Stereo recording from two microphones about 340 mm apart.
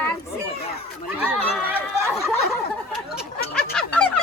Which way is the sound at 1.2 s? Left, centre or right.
Centre.